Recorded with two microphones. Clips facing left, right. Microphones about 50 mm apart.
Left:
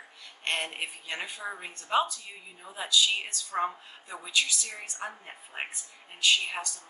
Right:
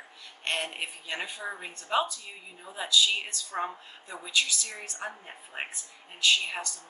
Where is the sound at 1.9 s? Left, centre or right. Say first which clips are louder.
Left 1 dB; centre.